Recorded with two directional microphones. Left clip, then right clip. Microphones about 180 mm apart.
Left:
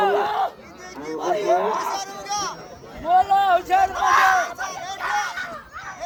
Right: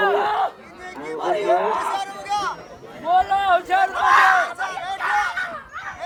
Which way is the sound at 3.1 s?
25° right (ahead or behind).